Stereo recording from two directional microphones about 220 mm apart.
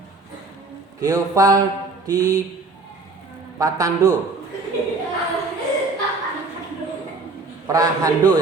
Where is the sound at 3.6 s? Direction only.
15° right (ahead or behind).